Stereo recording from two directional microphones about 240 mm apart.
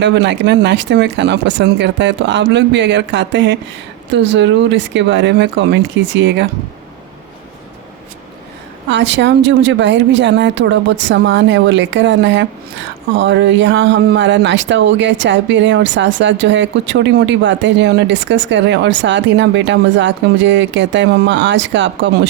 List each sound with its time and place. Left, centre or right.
0.0 s speech: right
8.9 s speech: right